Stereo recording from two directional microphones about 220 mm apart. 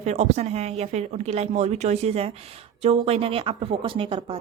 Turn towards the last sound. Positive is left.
turn(degrees=-25)  # may be behind; listen again after turning